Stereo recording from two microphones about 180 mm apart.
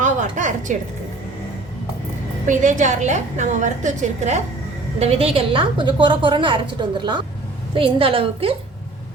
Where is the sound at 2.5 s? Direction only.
45° right (ahead or behind).